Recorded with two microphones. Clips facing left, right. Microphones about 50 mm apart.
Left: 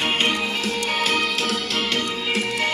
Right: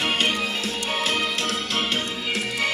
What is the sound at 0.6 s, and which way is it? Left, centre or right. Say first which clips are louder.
Music: left 3 dB; left.